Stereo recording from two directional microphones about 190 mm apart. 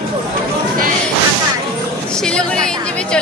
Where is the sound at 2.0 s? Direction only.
5° left (ahead or behind).